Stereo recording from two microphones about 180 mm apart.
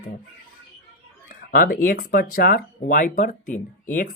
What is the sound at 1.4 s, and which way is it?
Speech, 55° left (ahead or behind).